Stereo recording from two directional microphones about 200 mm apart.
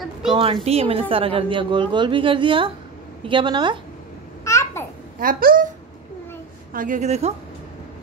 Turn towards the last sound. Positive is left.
turn(degrees=-35)  # may be behind; listen again after turning